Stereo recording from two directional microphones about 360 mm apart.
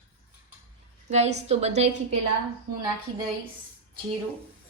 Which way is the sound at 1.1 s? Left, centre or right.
Centre.